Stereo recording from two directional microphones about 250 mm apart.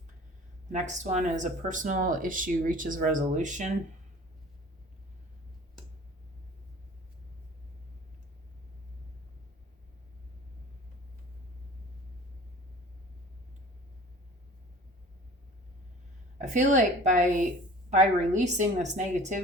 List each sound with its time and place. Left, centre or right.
0.7 s speech: right
16.4 s a woman's voice: right